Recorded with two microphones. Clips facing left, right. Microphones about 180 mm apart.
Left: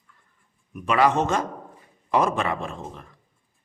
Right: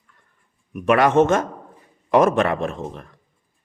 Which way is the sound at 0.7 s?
65° right (ahead or behind).